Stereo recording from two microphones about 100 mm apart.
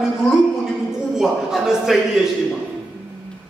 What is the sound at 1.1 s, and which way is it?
Speech, 5° right (ahead or behind).